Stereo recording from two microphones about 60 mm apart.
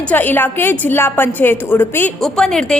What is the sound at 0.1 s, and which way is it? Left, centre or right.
A woman's voice, left.